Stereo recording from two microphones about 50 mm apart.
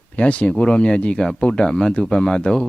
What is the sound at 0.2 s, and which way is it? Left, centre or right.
Speech, left.